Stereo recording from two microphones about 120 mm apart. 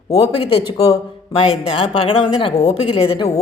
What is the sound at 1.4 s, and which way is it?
Speech, 55° left (ahead or behind).